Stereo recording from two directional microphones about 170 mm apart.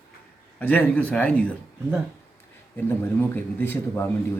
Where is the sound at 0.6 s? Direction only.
10° left (ahead or behind).